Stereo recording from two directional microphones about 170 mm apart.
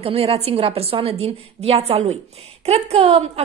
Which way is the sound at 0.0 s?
35° right (ahead or behind).